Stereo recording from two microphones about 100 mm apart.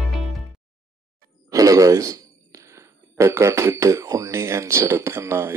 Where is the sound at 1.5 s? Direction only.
35° right (ahead or behind).